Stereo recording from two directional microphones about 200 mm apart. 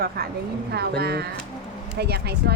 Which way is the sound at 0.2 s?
50° right (ahead or behind).